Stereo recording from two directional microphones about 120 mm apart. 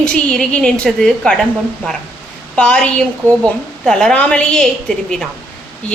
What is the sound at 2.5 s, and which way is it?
A woman's voice, 10° left (ahead or behind).